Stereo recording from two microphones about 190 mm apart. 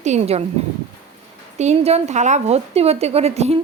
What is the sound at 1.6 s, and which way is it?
A woman's voice, 35° right (ahead or behind).